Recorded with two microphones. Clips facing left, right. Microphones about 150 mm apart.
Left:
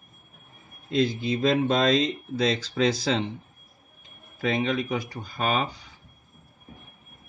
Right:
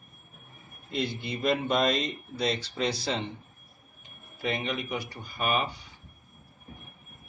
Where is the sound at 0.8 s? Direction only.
90° left.